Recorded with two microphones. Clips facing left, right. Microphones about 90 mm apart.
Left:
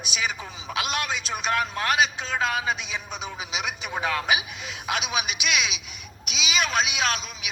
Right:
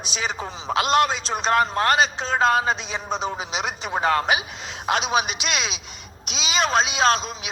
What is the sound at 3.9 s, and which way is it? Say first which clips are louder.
A man's voice: right 5 dB; 45° right (ahead or behind).